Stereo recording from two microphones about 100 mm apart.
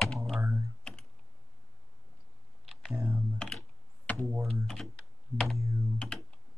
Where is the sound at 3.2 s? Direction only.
Centre (ahead or behind).